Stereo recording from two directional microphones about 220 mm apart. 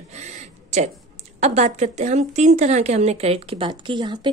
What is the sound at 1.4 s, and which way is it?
Speech, 30° right (ahead or behind).